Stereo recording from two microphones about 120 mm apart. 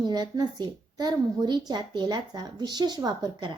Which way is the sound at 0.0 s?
35° right (ahead or behind).